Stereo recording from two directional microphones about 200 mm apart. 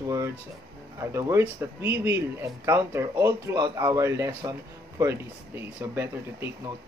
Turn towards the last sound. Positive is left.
turn(degrees=-15)  # may be behind; listen again after turning